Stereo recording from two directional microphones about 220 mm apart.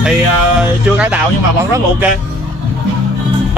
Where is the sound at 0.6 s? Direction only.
5° right (ahead or behind).